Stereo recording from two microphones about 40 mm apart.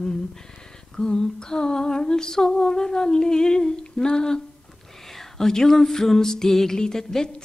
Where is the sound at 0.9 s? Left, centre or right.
Centre.